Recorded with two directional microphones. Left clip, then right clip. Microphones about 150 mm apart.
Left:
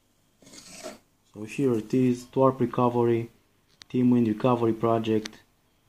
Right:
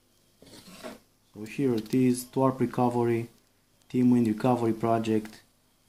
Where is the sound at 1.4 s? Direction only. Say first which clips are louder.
Left 2 dB; 25° left (ahead or behind).